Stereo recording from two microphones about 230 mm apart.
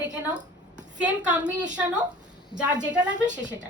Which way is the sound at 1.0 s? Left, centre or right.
Centre.